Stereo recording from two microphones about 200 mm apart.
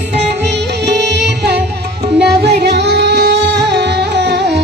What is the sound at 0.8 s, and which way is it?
Music, 55° right (ahead or behind).